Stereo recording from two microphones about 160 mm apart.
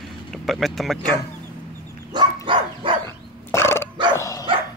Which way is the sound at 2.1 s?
25° right (ahead or behind).